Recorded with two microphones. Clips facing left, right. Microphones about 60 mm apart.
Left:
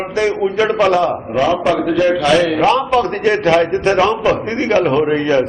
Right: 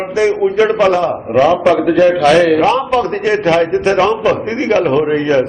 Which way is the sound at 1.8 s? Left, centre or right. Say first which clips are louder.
Right 4 dB; right.